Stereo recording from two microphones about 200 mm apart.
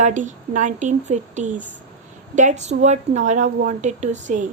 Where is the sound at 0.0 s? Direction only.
40° right (ahead or behind).